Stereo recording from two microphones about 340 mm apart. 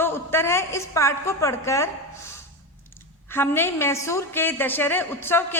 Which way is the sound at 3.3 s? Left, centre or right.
Centre.